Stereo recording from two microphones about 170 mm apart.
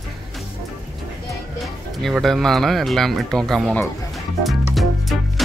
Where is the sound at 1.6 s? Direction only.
Centre (ahead or behind).